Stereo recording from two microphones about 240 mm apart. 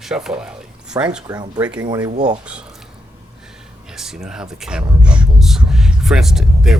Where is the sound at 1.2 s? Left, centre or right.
Centre.